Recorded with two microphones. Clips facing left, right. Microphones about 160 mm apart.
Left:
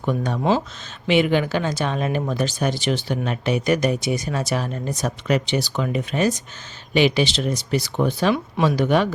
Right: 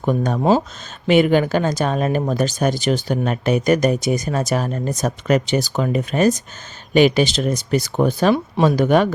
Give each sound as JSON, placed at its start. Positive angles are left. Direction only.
{"t": 0.0, "sound": "speech", "side_deg": -45}